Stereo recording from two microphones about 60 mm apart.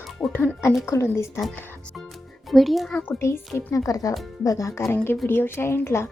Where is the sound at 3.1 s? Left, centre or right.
Left.